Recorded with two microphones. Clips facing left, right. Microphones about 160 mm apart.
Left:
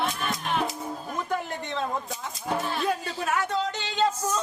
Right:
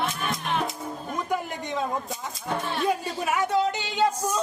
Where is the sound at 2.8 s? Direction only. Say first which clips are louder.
Right 2 dB; 10° right (ahead or behind).